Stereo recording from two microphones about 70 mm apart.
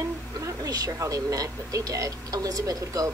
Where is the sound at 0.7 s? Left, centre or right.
Right.